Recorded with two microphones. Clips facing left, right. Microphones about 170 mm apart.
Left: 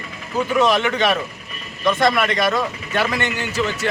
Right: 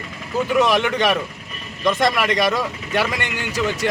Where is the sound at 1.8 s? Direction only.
15° right (ahead or behind).